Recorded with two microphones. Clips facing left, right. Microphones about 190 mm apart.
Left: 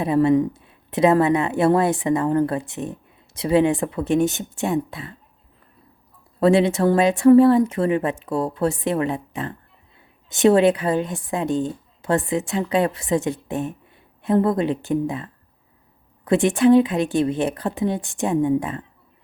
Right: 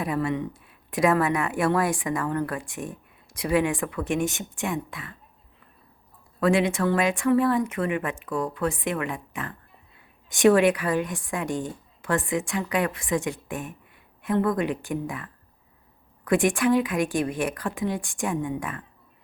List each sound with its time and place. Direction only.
0.0 s a woman's voice: 25° left (ahead or behind)
6.4 s a woman's voice: 30° left (ahead or behind)